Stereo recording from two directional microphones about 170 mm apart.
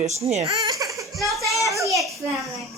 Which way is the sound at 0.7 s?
20° right (ahead or behind).